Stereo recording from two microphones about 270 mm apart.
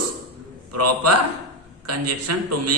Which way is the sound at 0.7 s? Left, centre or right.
Right.